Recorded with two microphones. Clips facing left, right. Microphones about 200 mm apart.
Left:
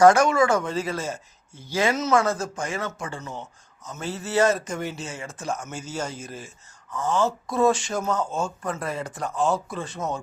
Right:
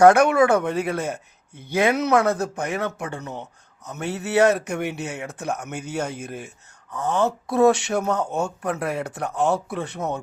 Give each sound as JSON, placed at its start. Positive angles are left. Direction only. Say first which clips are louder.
{"t": 0.0, "sound": "speech", "louder": "right 2 dB", "side_deg": -60}